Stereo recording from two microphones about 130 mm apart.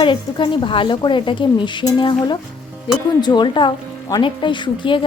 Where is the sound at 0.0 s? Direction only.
40° left (ahead or behind).